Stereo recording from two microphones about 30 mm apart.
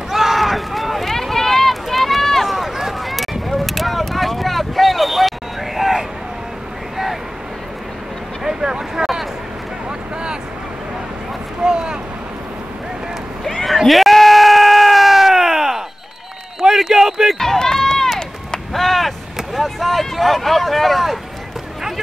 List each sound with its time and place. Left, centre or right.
0.1 s a sound: centre
1.1 s run: centre
2.5 s run: centre
5.8 s vehicle: centre
8.5 s vehicle: right
11.6 s boat: right
13.8 s bleat: centre
14.1 s a sound: centre
17.4 s run: centre
18.7 s a sound: centre
19.6 s vehicle: centre